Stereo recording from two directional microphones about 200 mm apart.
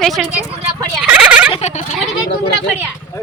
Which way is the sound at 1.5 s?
35° left (ahead or behind).